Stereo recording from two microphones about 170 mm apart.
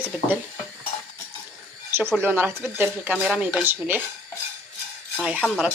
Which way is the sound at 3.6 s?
10° right (ahead or behind).